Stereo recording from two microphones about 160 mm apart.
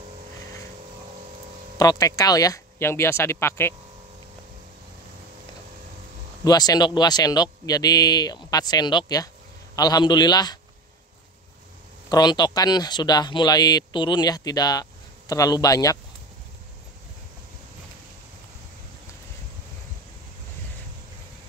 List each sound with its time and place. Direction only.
1.8 s speech: 25° left (ahead or behind)
6.4 s speech: 25° left (ahead or behind)
12.1 s speech: 25° left (ahead or behind)